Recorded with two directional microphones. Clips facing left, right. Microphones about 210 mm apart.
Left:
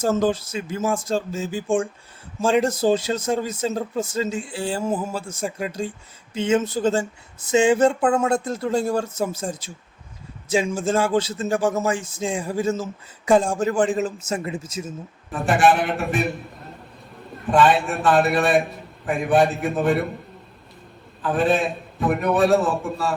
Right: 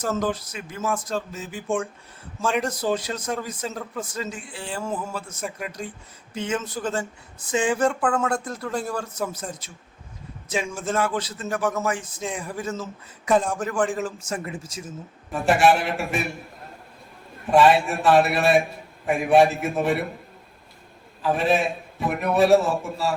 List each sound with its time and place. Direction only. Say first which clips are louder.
0.0 s a man's voice: left 5 dB; 25° left (ahead or behind)
15.3 s a man's voice: even; centre (ahead or behind)
17.5 s a man's voice: right 1 dB; centre (ahead or behind)
21.2 s a man's voice: left 1 dB; centre (ahead or behind)